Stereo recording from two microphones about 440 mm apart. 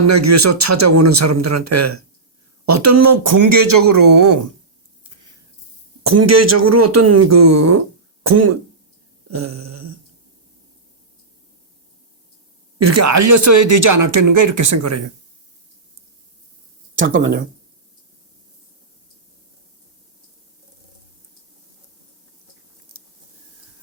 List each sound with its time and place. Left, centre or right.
0.0 s speech: right
6.0 s speech: right
9.3 s a sound: right
12.8 s speech: right
17.0 s speech: centre